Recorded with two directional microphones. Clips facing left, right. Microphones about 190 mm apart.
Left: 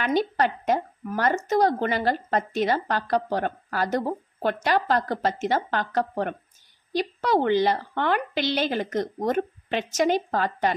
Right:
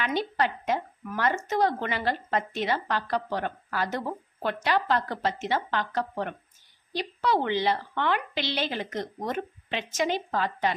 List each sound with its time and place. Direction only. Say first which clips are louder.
0.0 s speech: left 4 dB; 45° left (ahead or behind)